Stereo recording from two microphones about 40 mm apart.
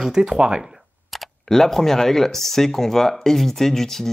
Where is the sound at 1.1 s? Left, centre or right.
Centre.